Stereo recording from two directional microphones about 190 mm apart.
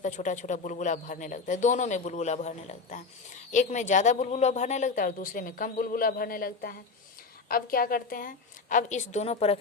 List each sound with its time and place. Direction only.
0.0 s a man's voice: 40° left (ahead or behind)